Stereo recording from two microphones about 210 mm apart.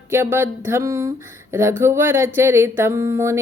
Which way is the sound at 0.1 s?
10° right (ahead or behind).